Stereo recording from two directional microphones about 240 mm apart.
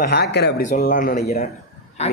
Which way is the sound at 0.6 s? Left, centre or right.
Left.